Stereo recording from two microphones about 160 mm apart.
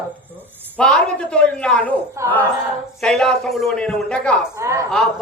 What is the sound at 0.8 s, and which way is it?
A woman's voice, 5° left (ahead or behind).